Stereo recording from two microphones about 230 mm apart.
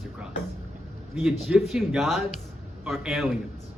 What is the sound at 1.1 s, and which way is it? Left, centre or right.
A man's voice, centre.